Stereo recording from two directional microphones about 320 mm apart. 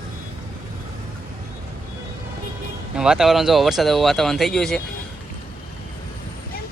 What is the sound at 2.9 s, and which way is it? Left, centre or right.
Speech, centre.